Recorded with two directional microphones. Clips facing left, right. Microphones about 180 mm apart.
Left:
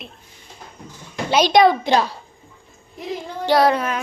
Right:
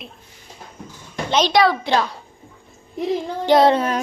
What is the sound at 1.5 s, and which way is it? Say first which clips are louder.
Speech: left 4 dB; 20° left (ahead or behind).